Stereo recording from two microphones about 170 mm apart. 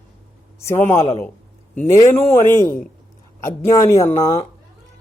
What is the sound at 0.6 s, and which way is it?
Speech, 15° left (ahead or behind).